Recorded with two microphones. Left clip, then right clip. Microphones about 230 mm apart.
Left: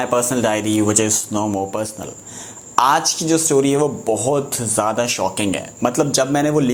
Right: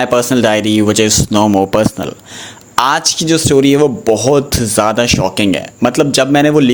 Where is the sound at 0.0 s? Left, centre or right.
Right.